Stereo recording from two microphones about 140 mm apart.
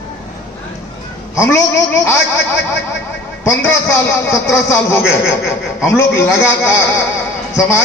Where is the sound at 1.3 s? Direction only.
20° left (ahead or behind).